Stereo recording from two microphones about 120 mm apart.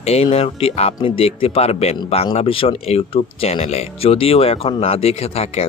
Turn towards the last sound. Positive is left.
turn(degrees=55)  # may be behind; listen again after turning